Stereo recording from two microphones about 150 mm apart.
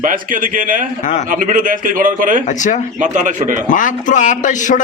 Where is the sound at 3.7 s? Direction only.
60° left (ahead or behind).